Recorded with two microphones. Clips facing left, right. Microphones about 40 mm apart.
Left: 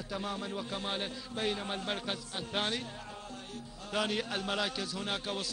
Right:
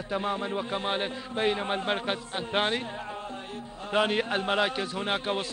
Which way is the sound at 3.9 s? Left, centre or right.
Right.